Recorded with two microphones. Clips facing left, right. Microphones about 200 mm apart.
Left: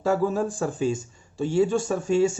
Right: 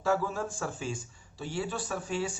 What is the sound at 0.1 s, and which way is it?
Speech, 40° left (ahead or behind).